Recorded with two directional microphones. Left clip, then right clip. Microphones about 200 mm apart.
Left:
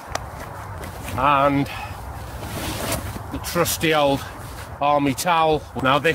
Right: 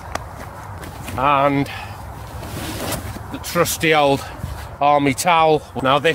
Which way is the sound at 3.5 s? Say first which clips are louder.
Right 4 dB; 35° right (ahead or behind).